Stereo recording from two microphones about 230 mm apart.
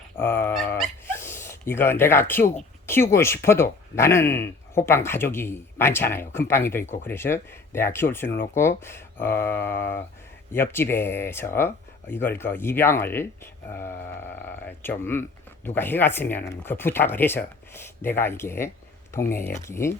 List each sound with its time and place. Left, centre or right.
0.2 s dog: centre
2.8 s speech: centre
6.8 s speech: left
7.1 s speech: centre